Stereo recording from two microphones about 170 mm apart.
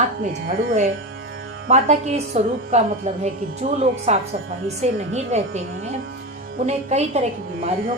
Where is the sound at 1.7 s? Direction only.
45° right (ahead or behind).